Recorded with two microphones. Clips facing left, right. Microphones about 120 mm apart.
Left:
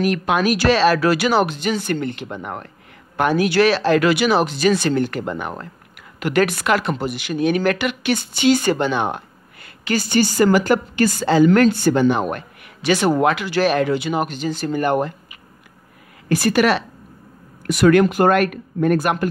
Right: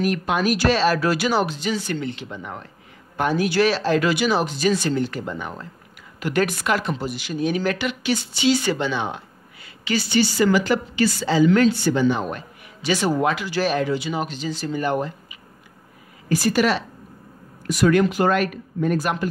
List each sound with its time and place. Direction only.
0.0 s speech: 80° left; by 2.7 s 55° left (ahead or behind)
3.2 s speech: 70° left (ahead or behind)